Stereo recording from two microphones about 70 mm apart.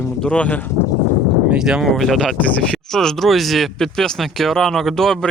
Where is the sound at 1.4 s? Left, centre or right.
Centre.